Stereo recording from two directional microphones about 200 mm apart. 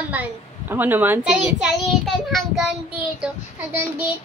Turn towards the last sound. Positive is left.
turn(degrees=-10)  # may be behind; listen again after turning